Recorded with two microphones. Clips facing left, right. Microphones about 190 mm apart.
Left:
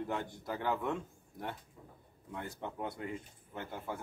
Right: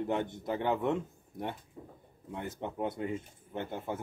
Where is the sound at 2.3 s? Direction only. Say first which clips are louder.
Right 4 dB; 20° right (ahead or behind).